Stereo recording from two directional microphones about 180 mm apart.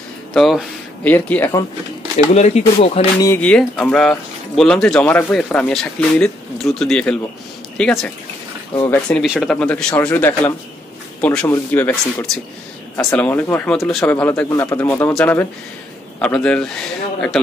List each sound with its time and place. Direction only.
0.3 s a sound: centre (ahead or behind)
1.1 s speech: 10° left (ahead or behind)
2.1 s speech: 40° left (ahead or behind)
3.3 s speech: 5° left (ahead or behind)
9.2 s speech: centre (ahead or behind)